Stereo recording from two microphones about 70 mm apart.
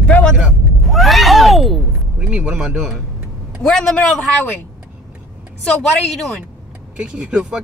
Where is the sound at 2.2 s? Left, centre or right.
Centre.